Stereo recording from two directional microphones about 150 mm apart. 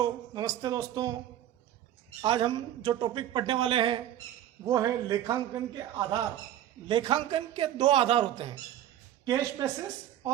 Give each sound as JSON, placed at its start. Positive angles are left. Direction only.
{"t": 0.0, "sound": "a man's voice", "side_deg": -25}
{"t": 2.2, "sound": "a woman's voice", "side_deg": -30}
{"t": 9.2, "sound": "a man's voice", "side_deg": -25}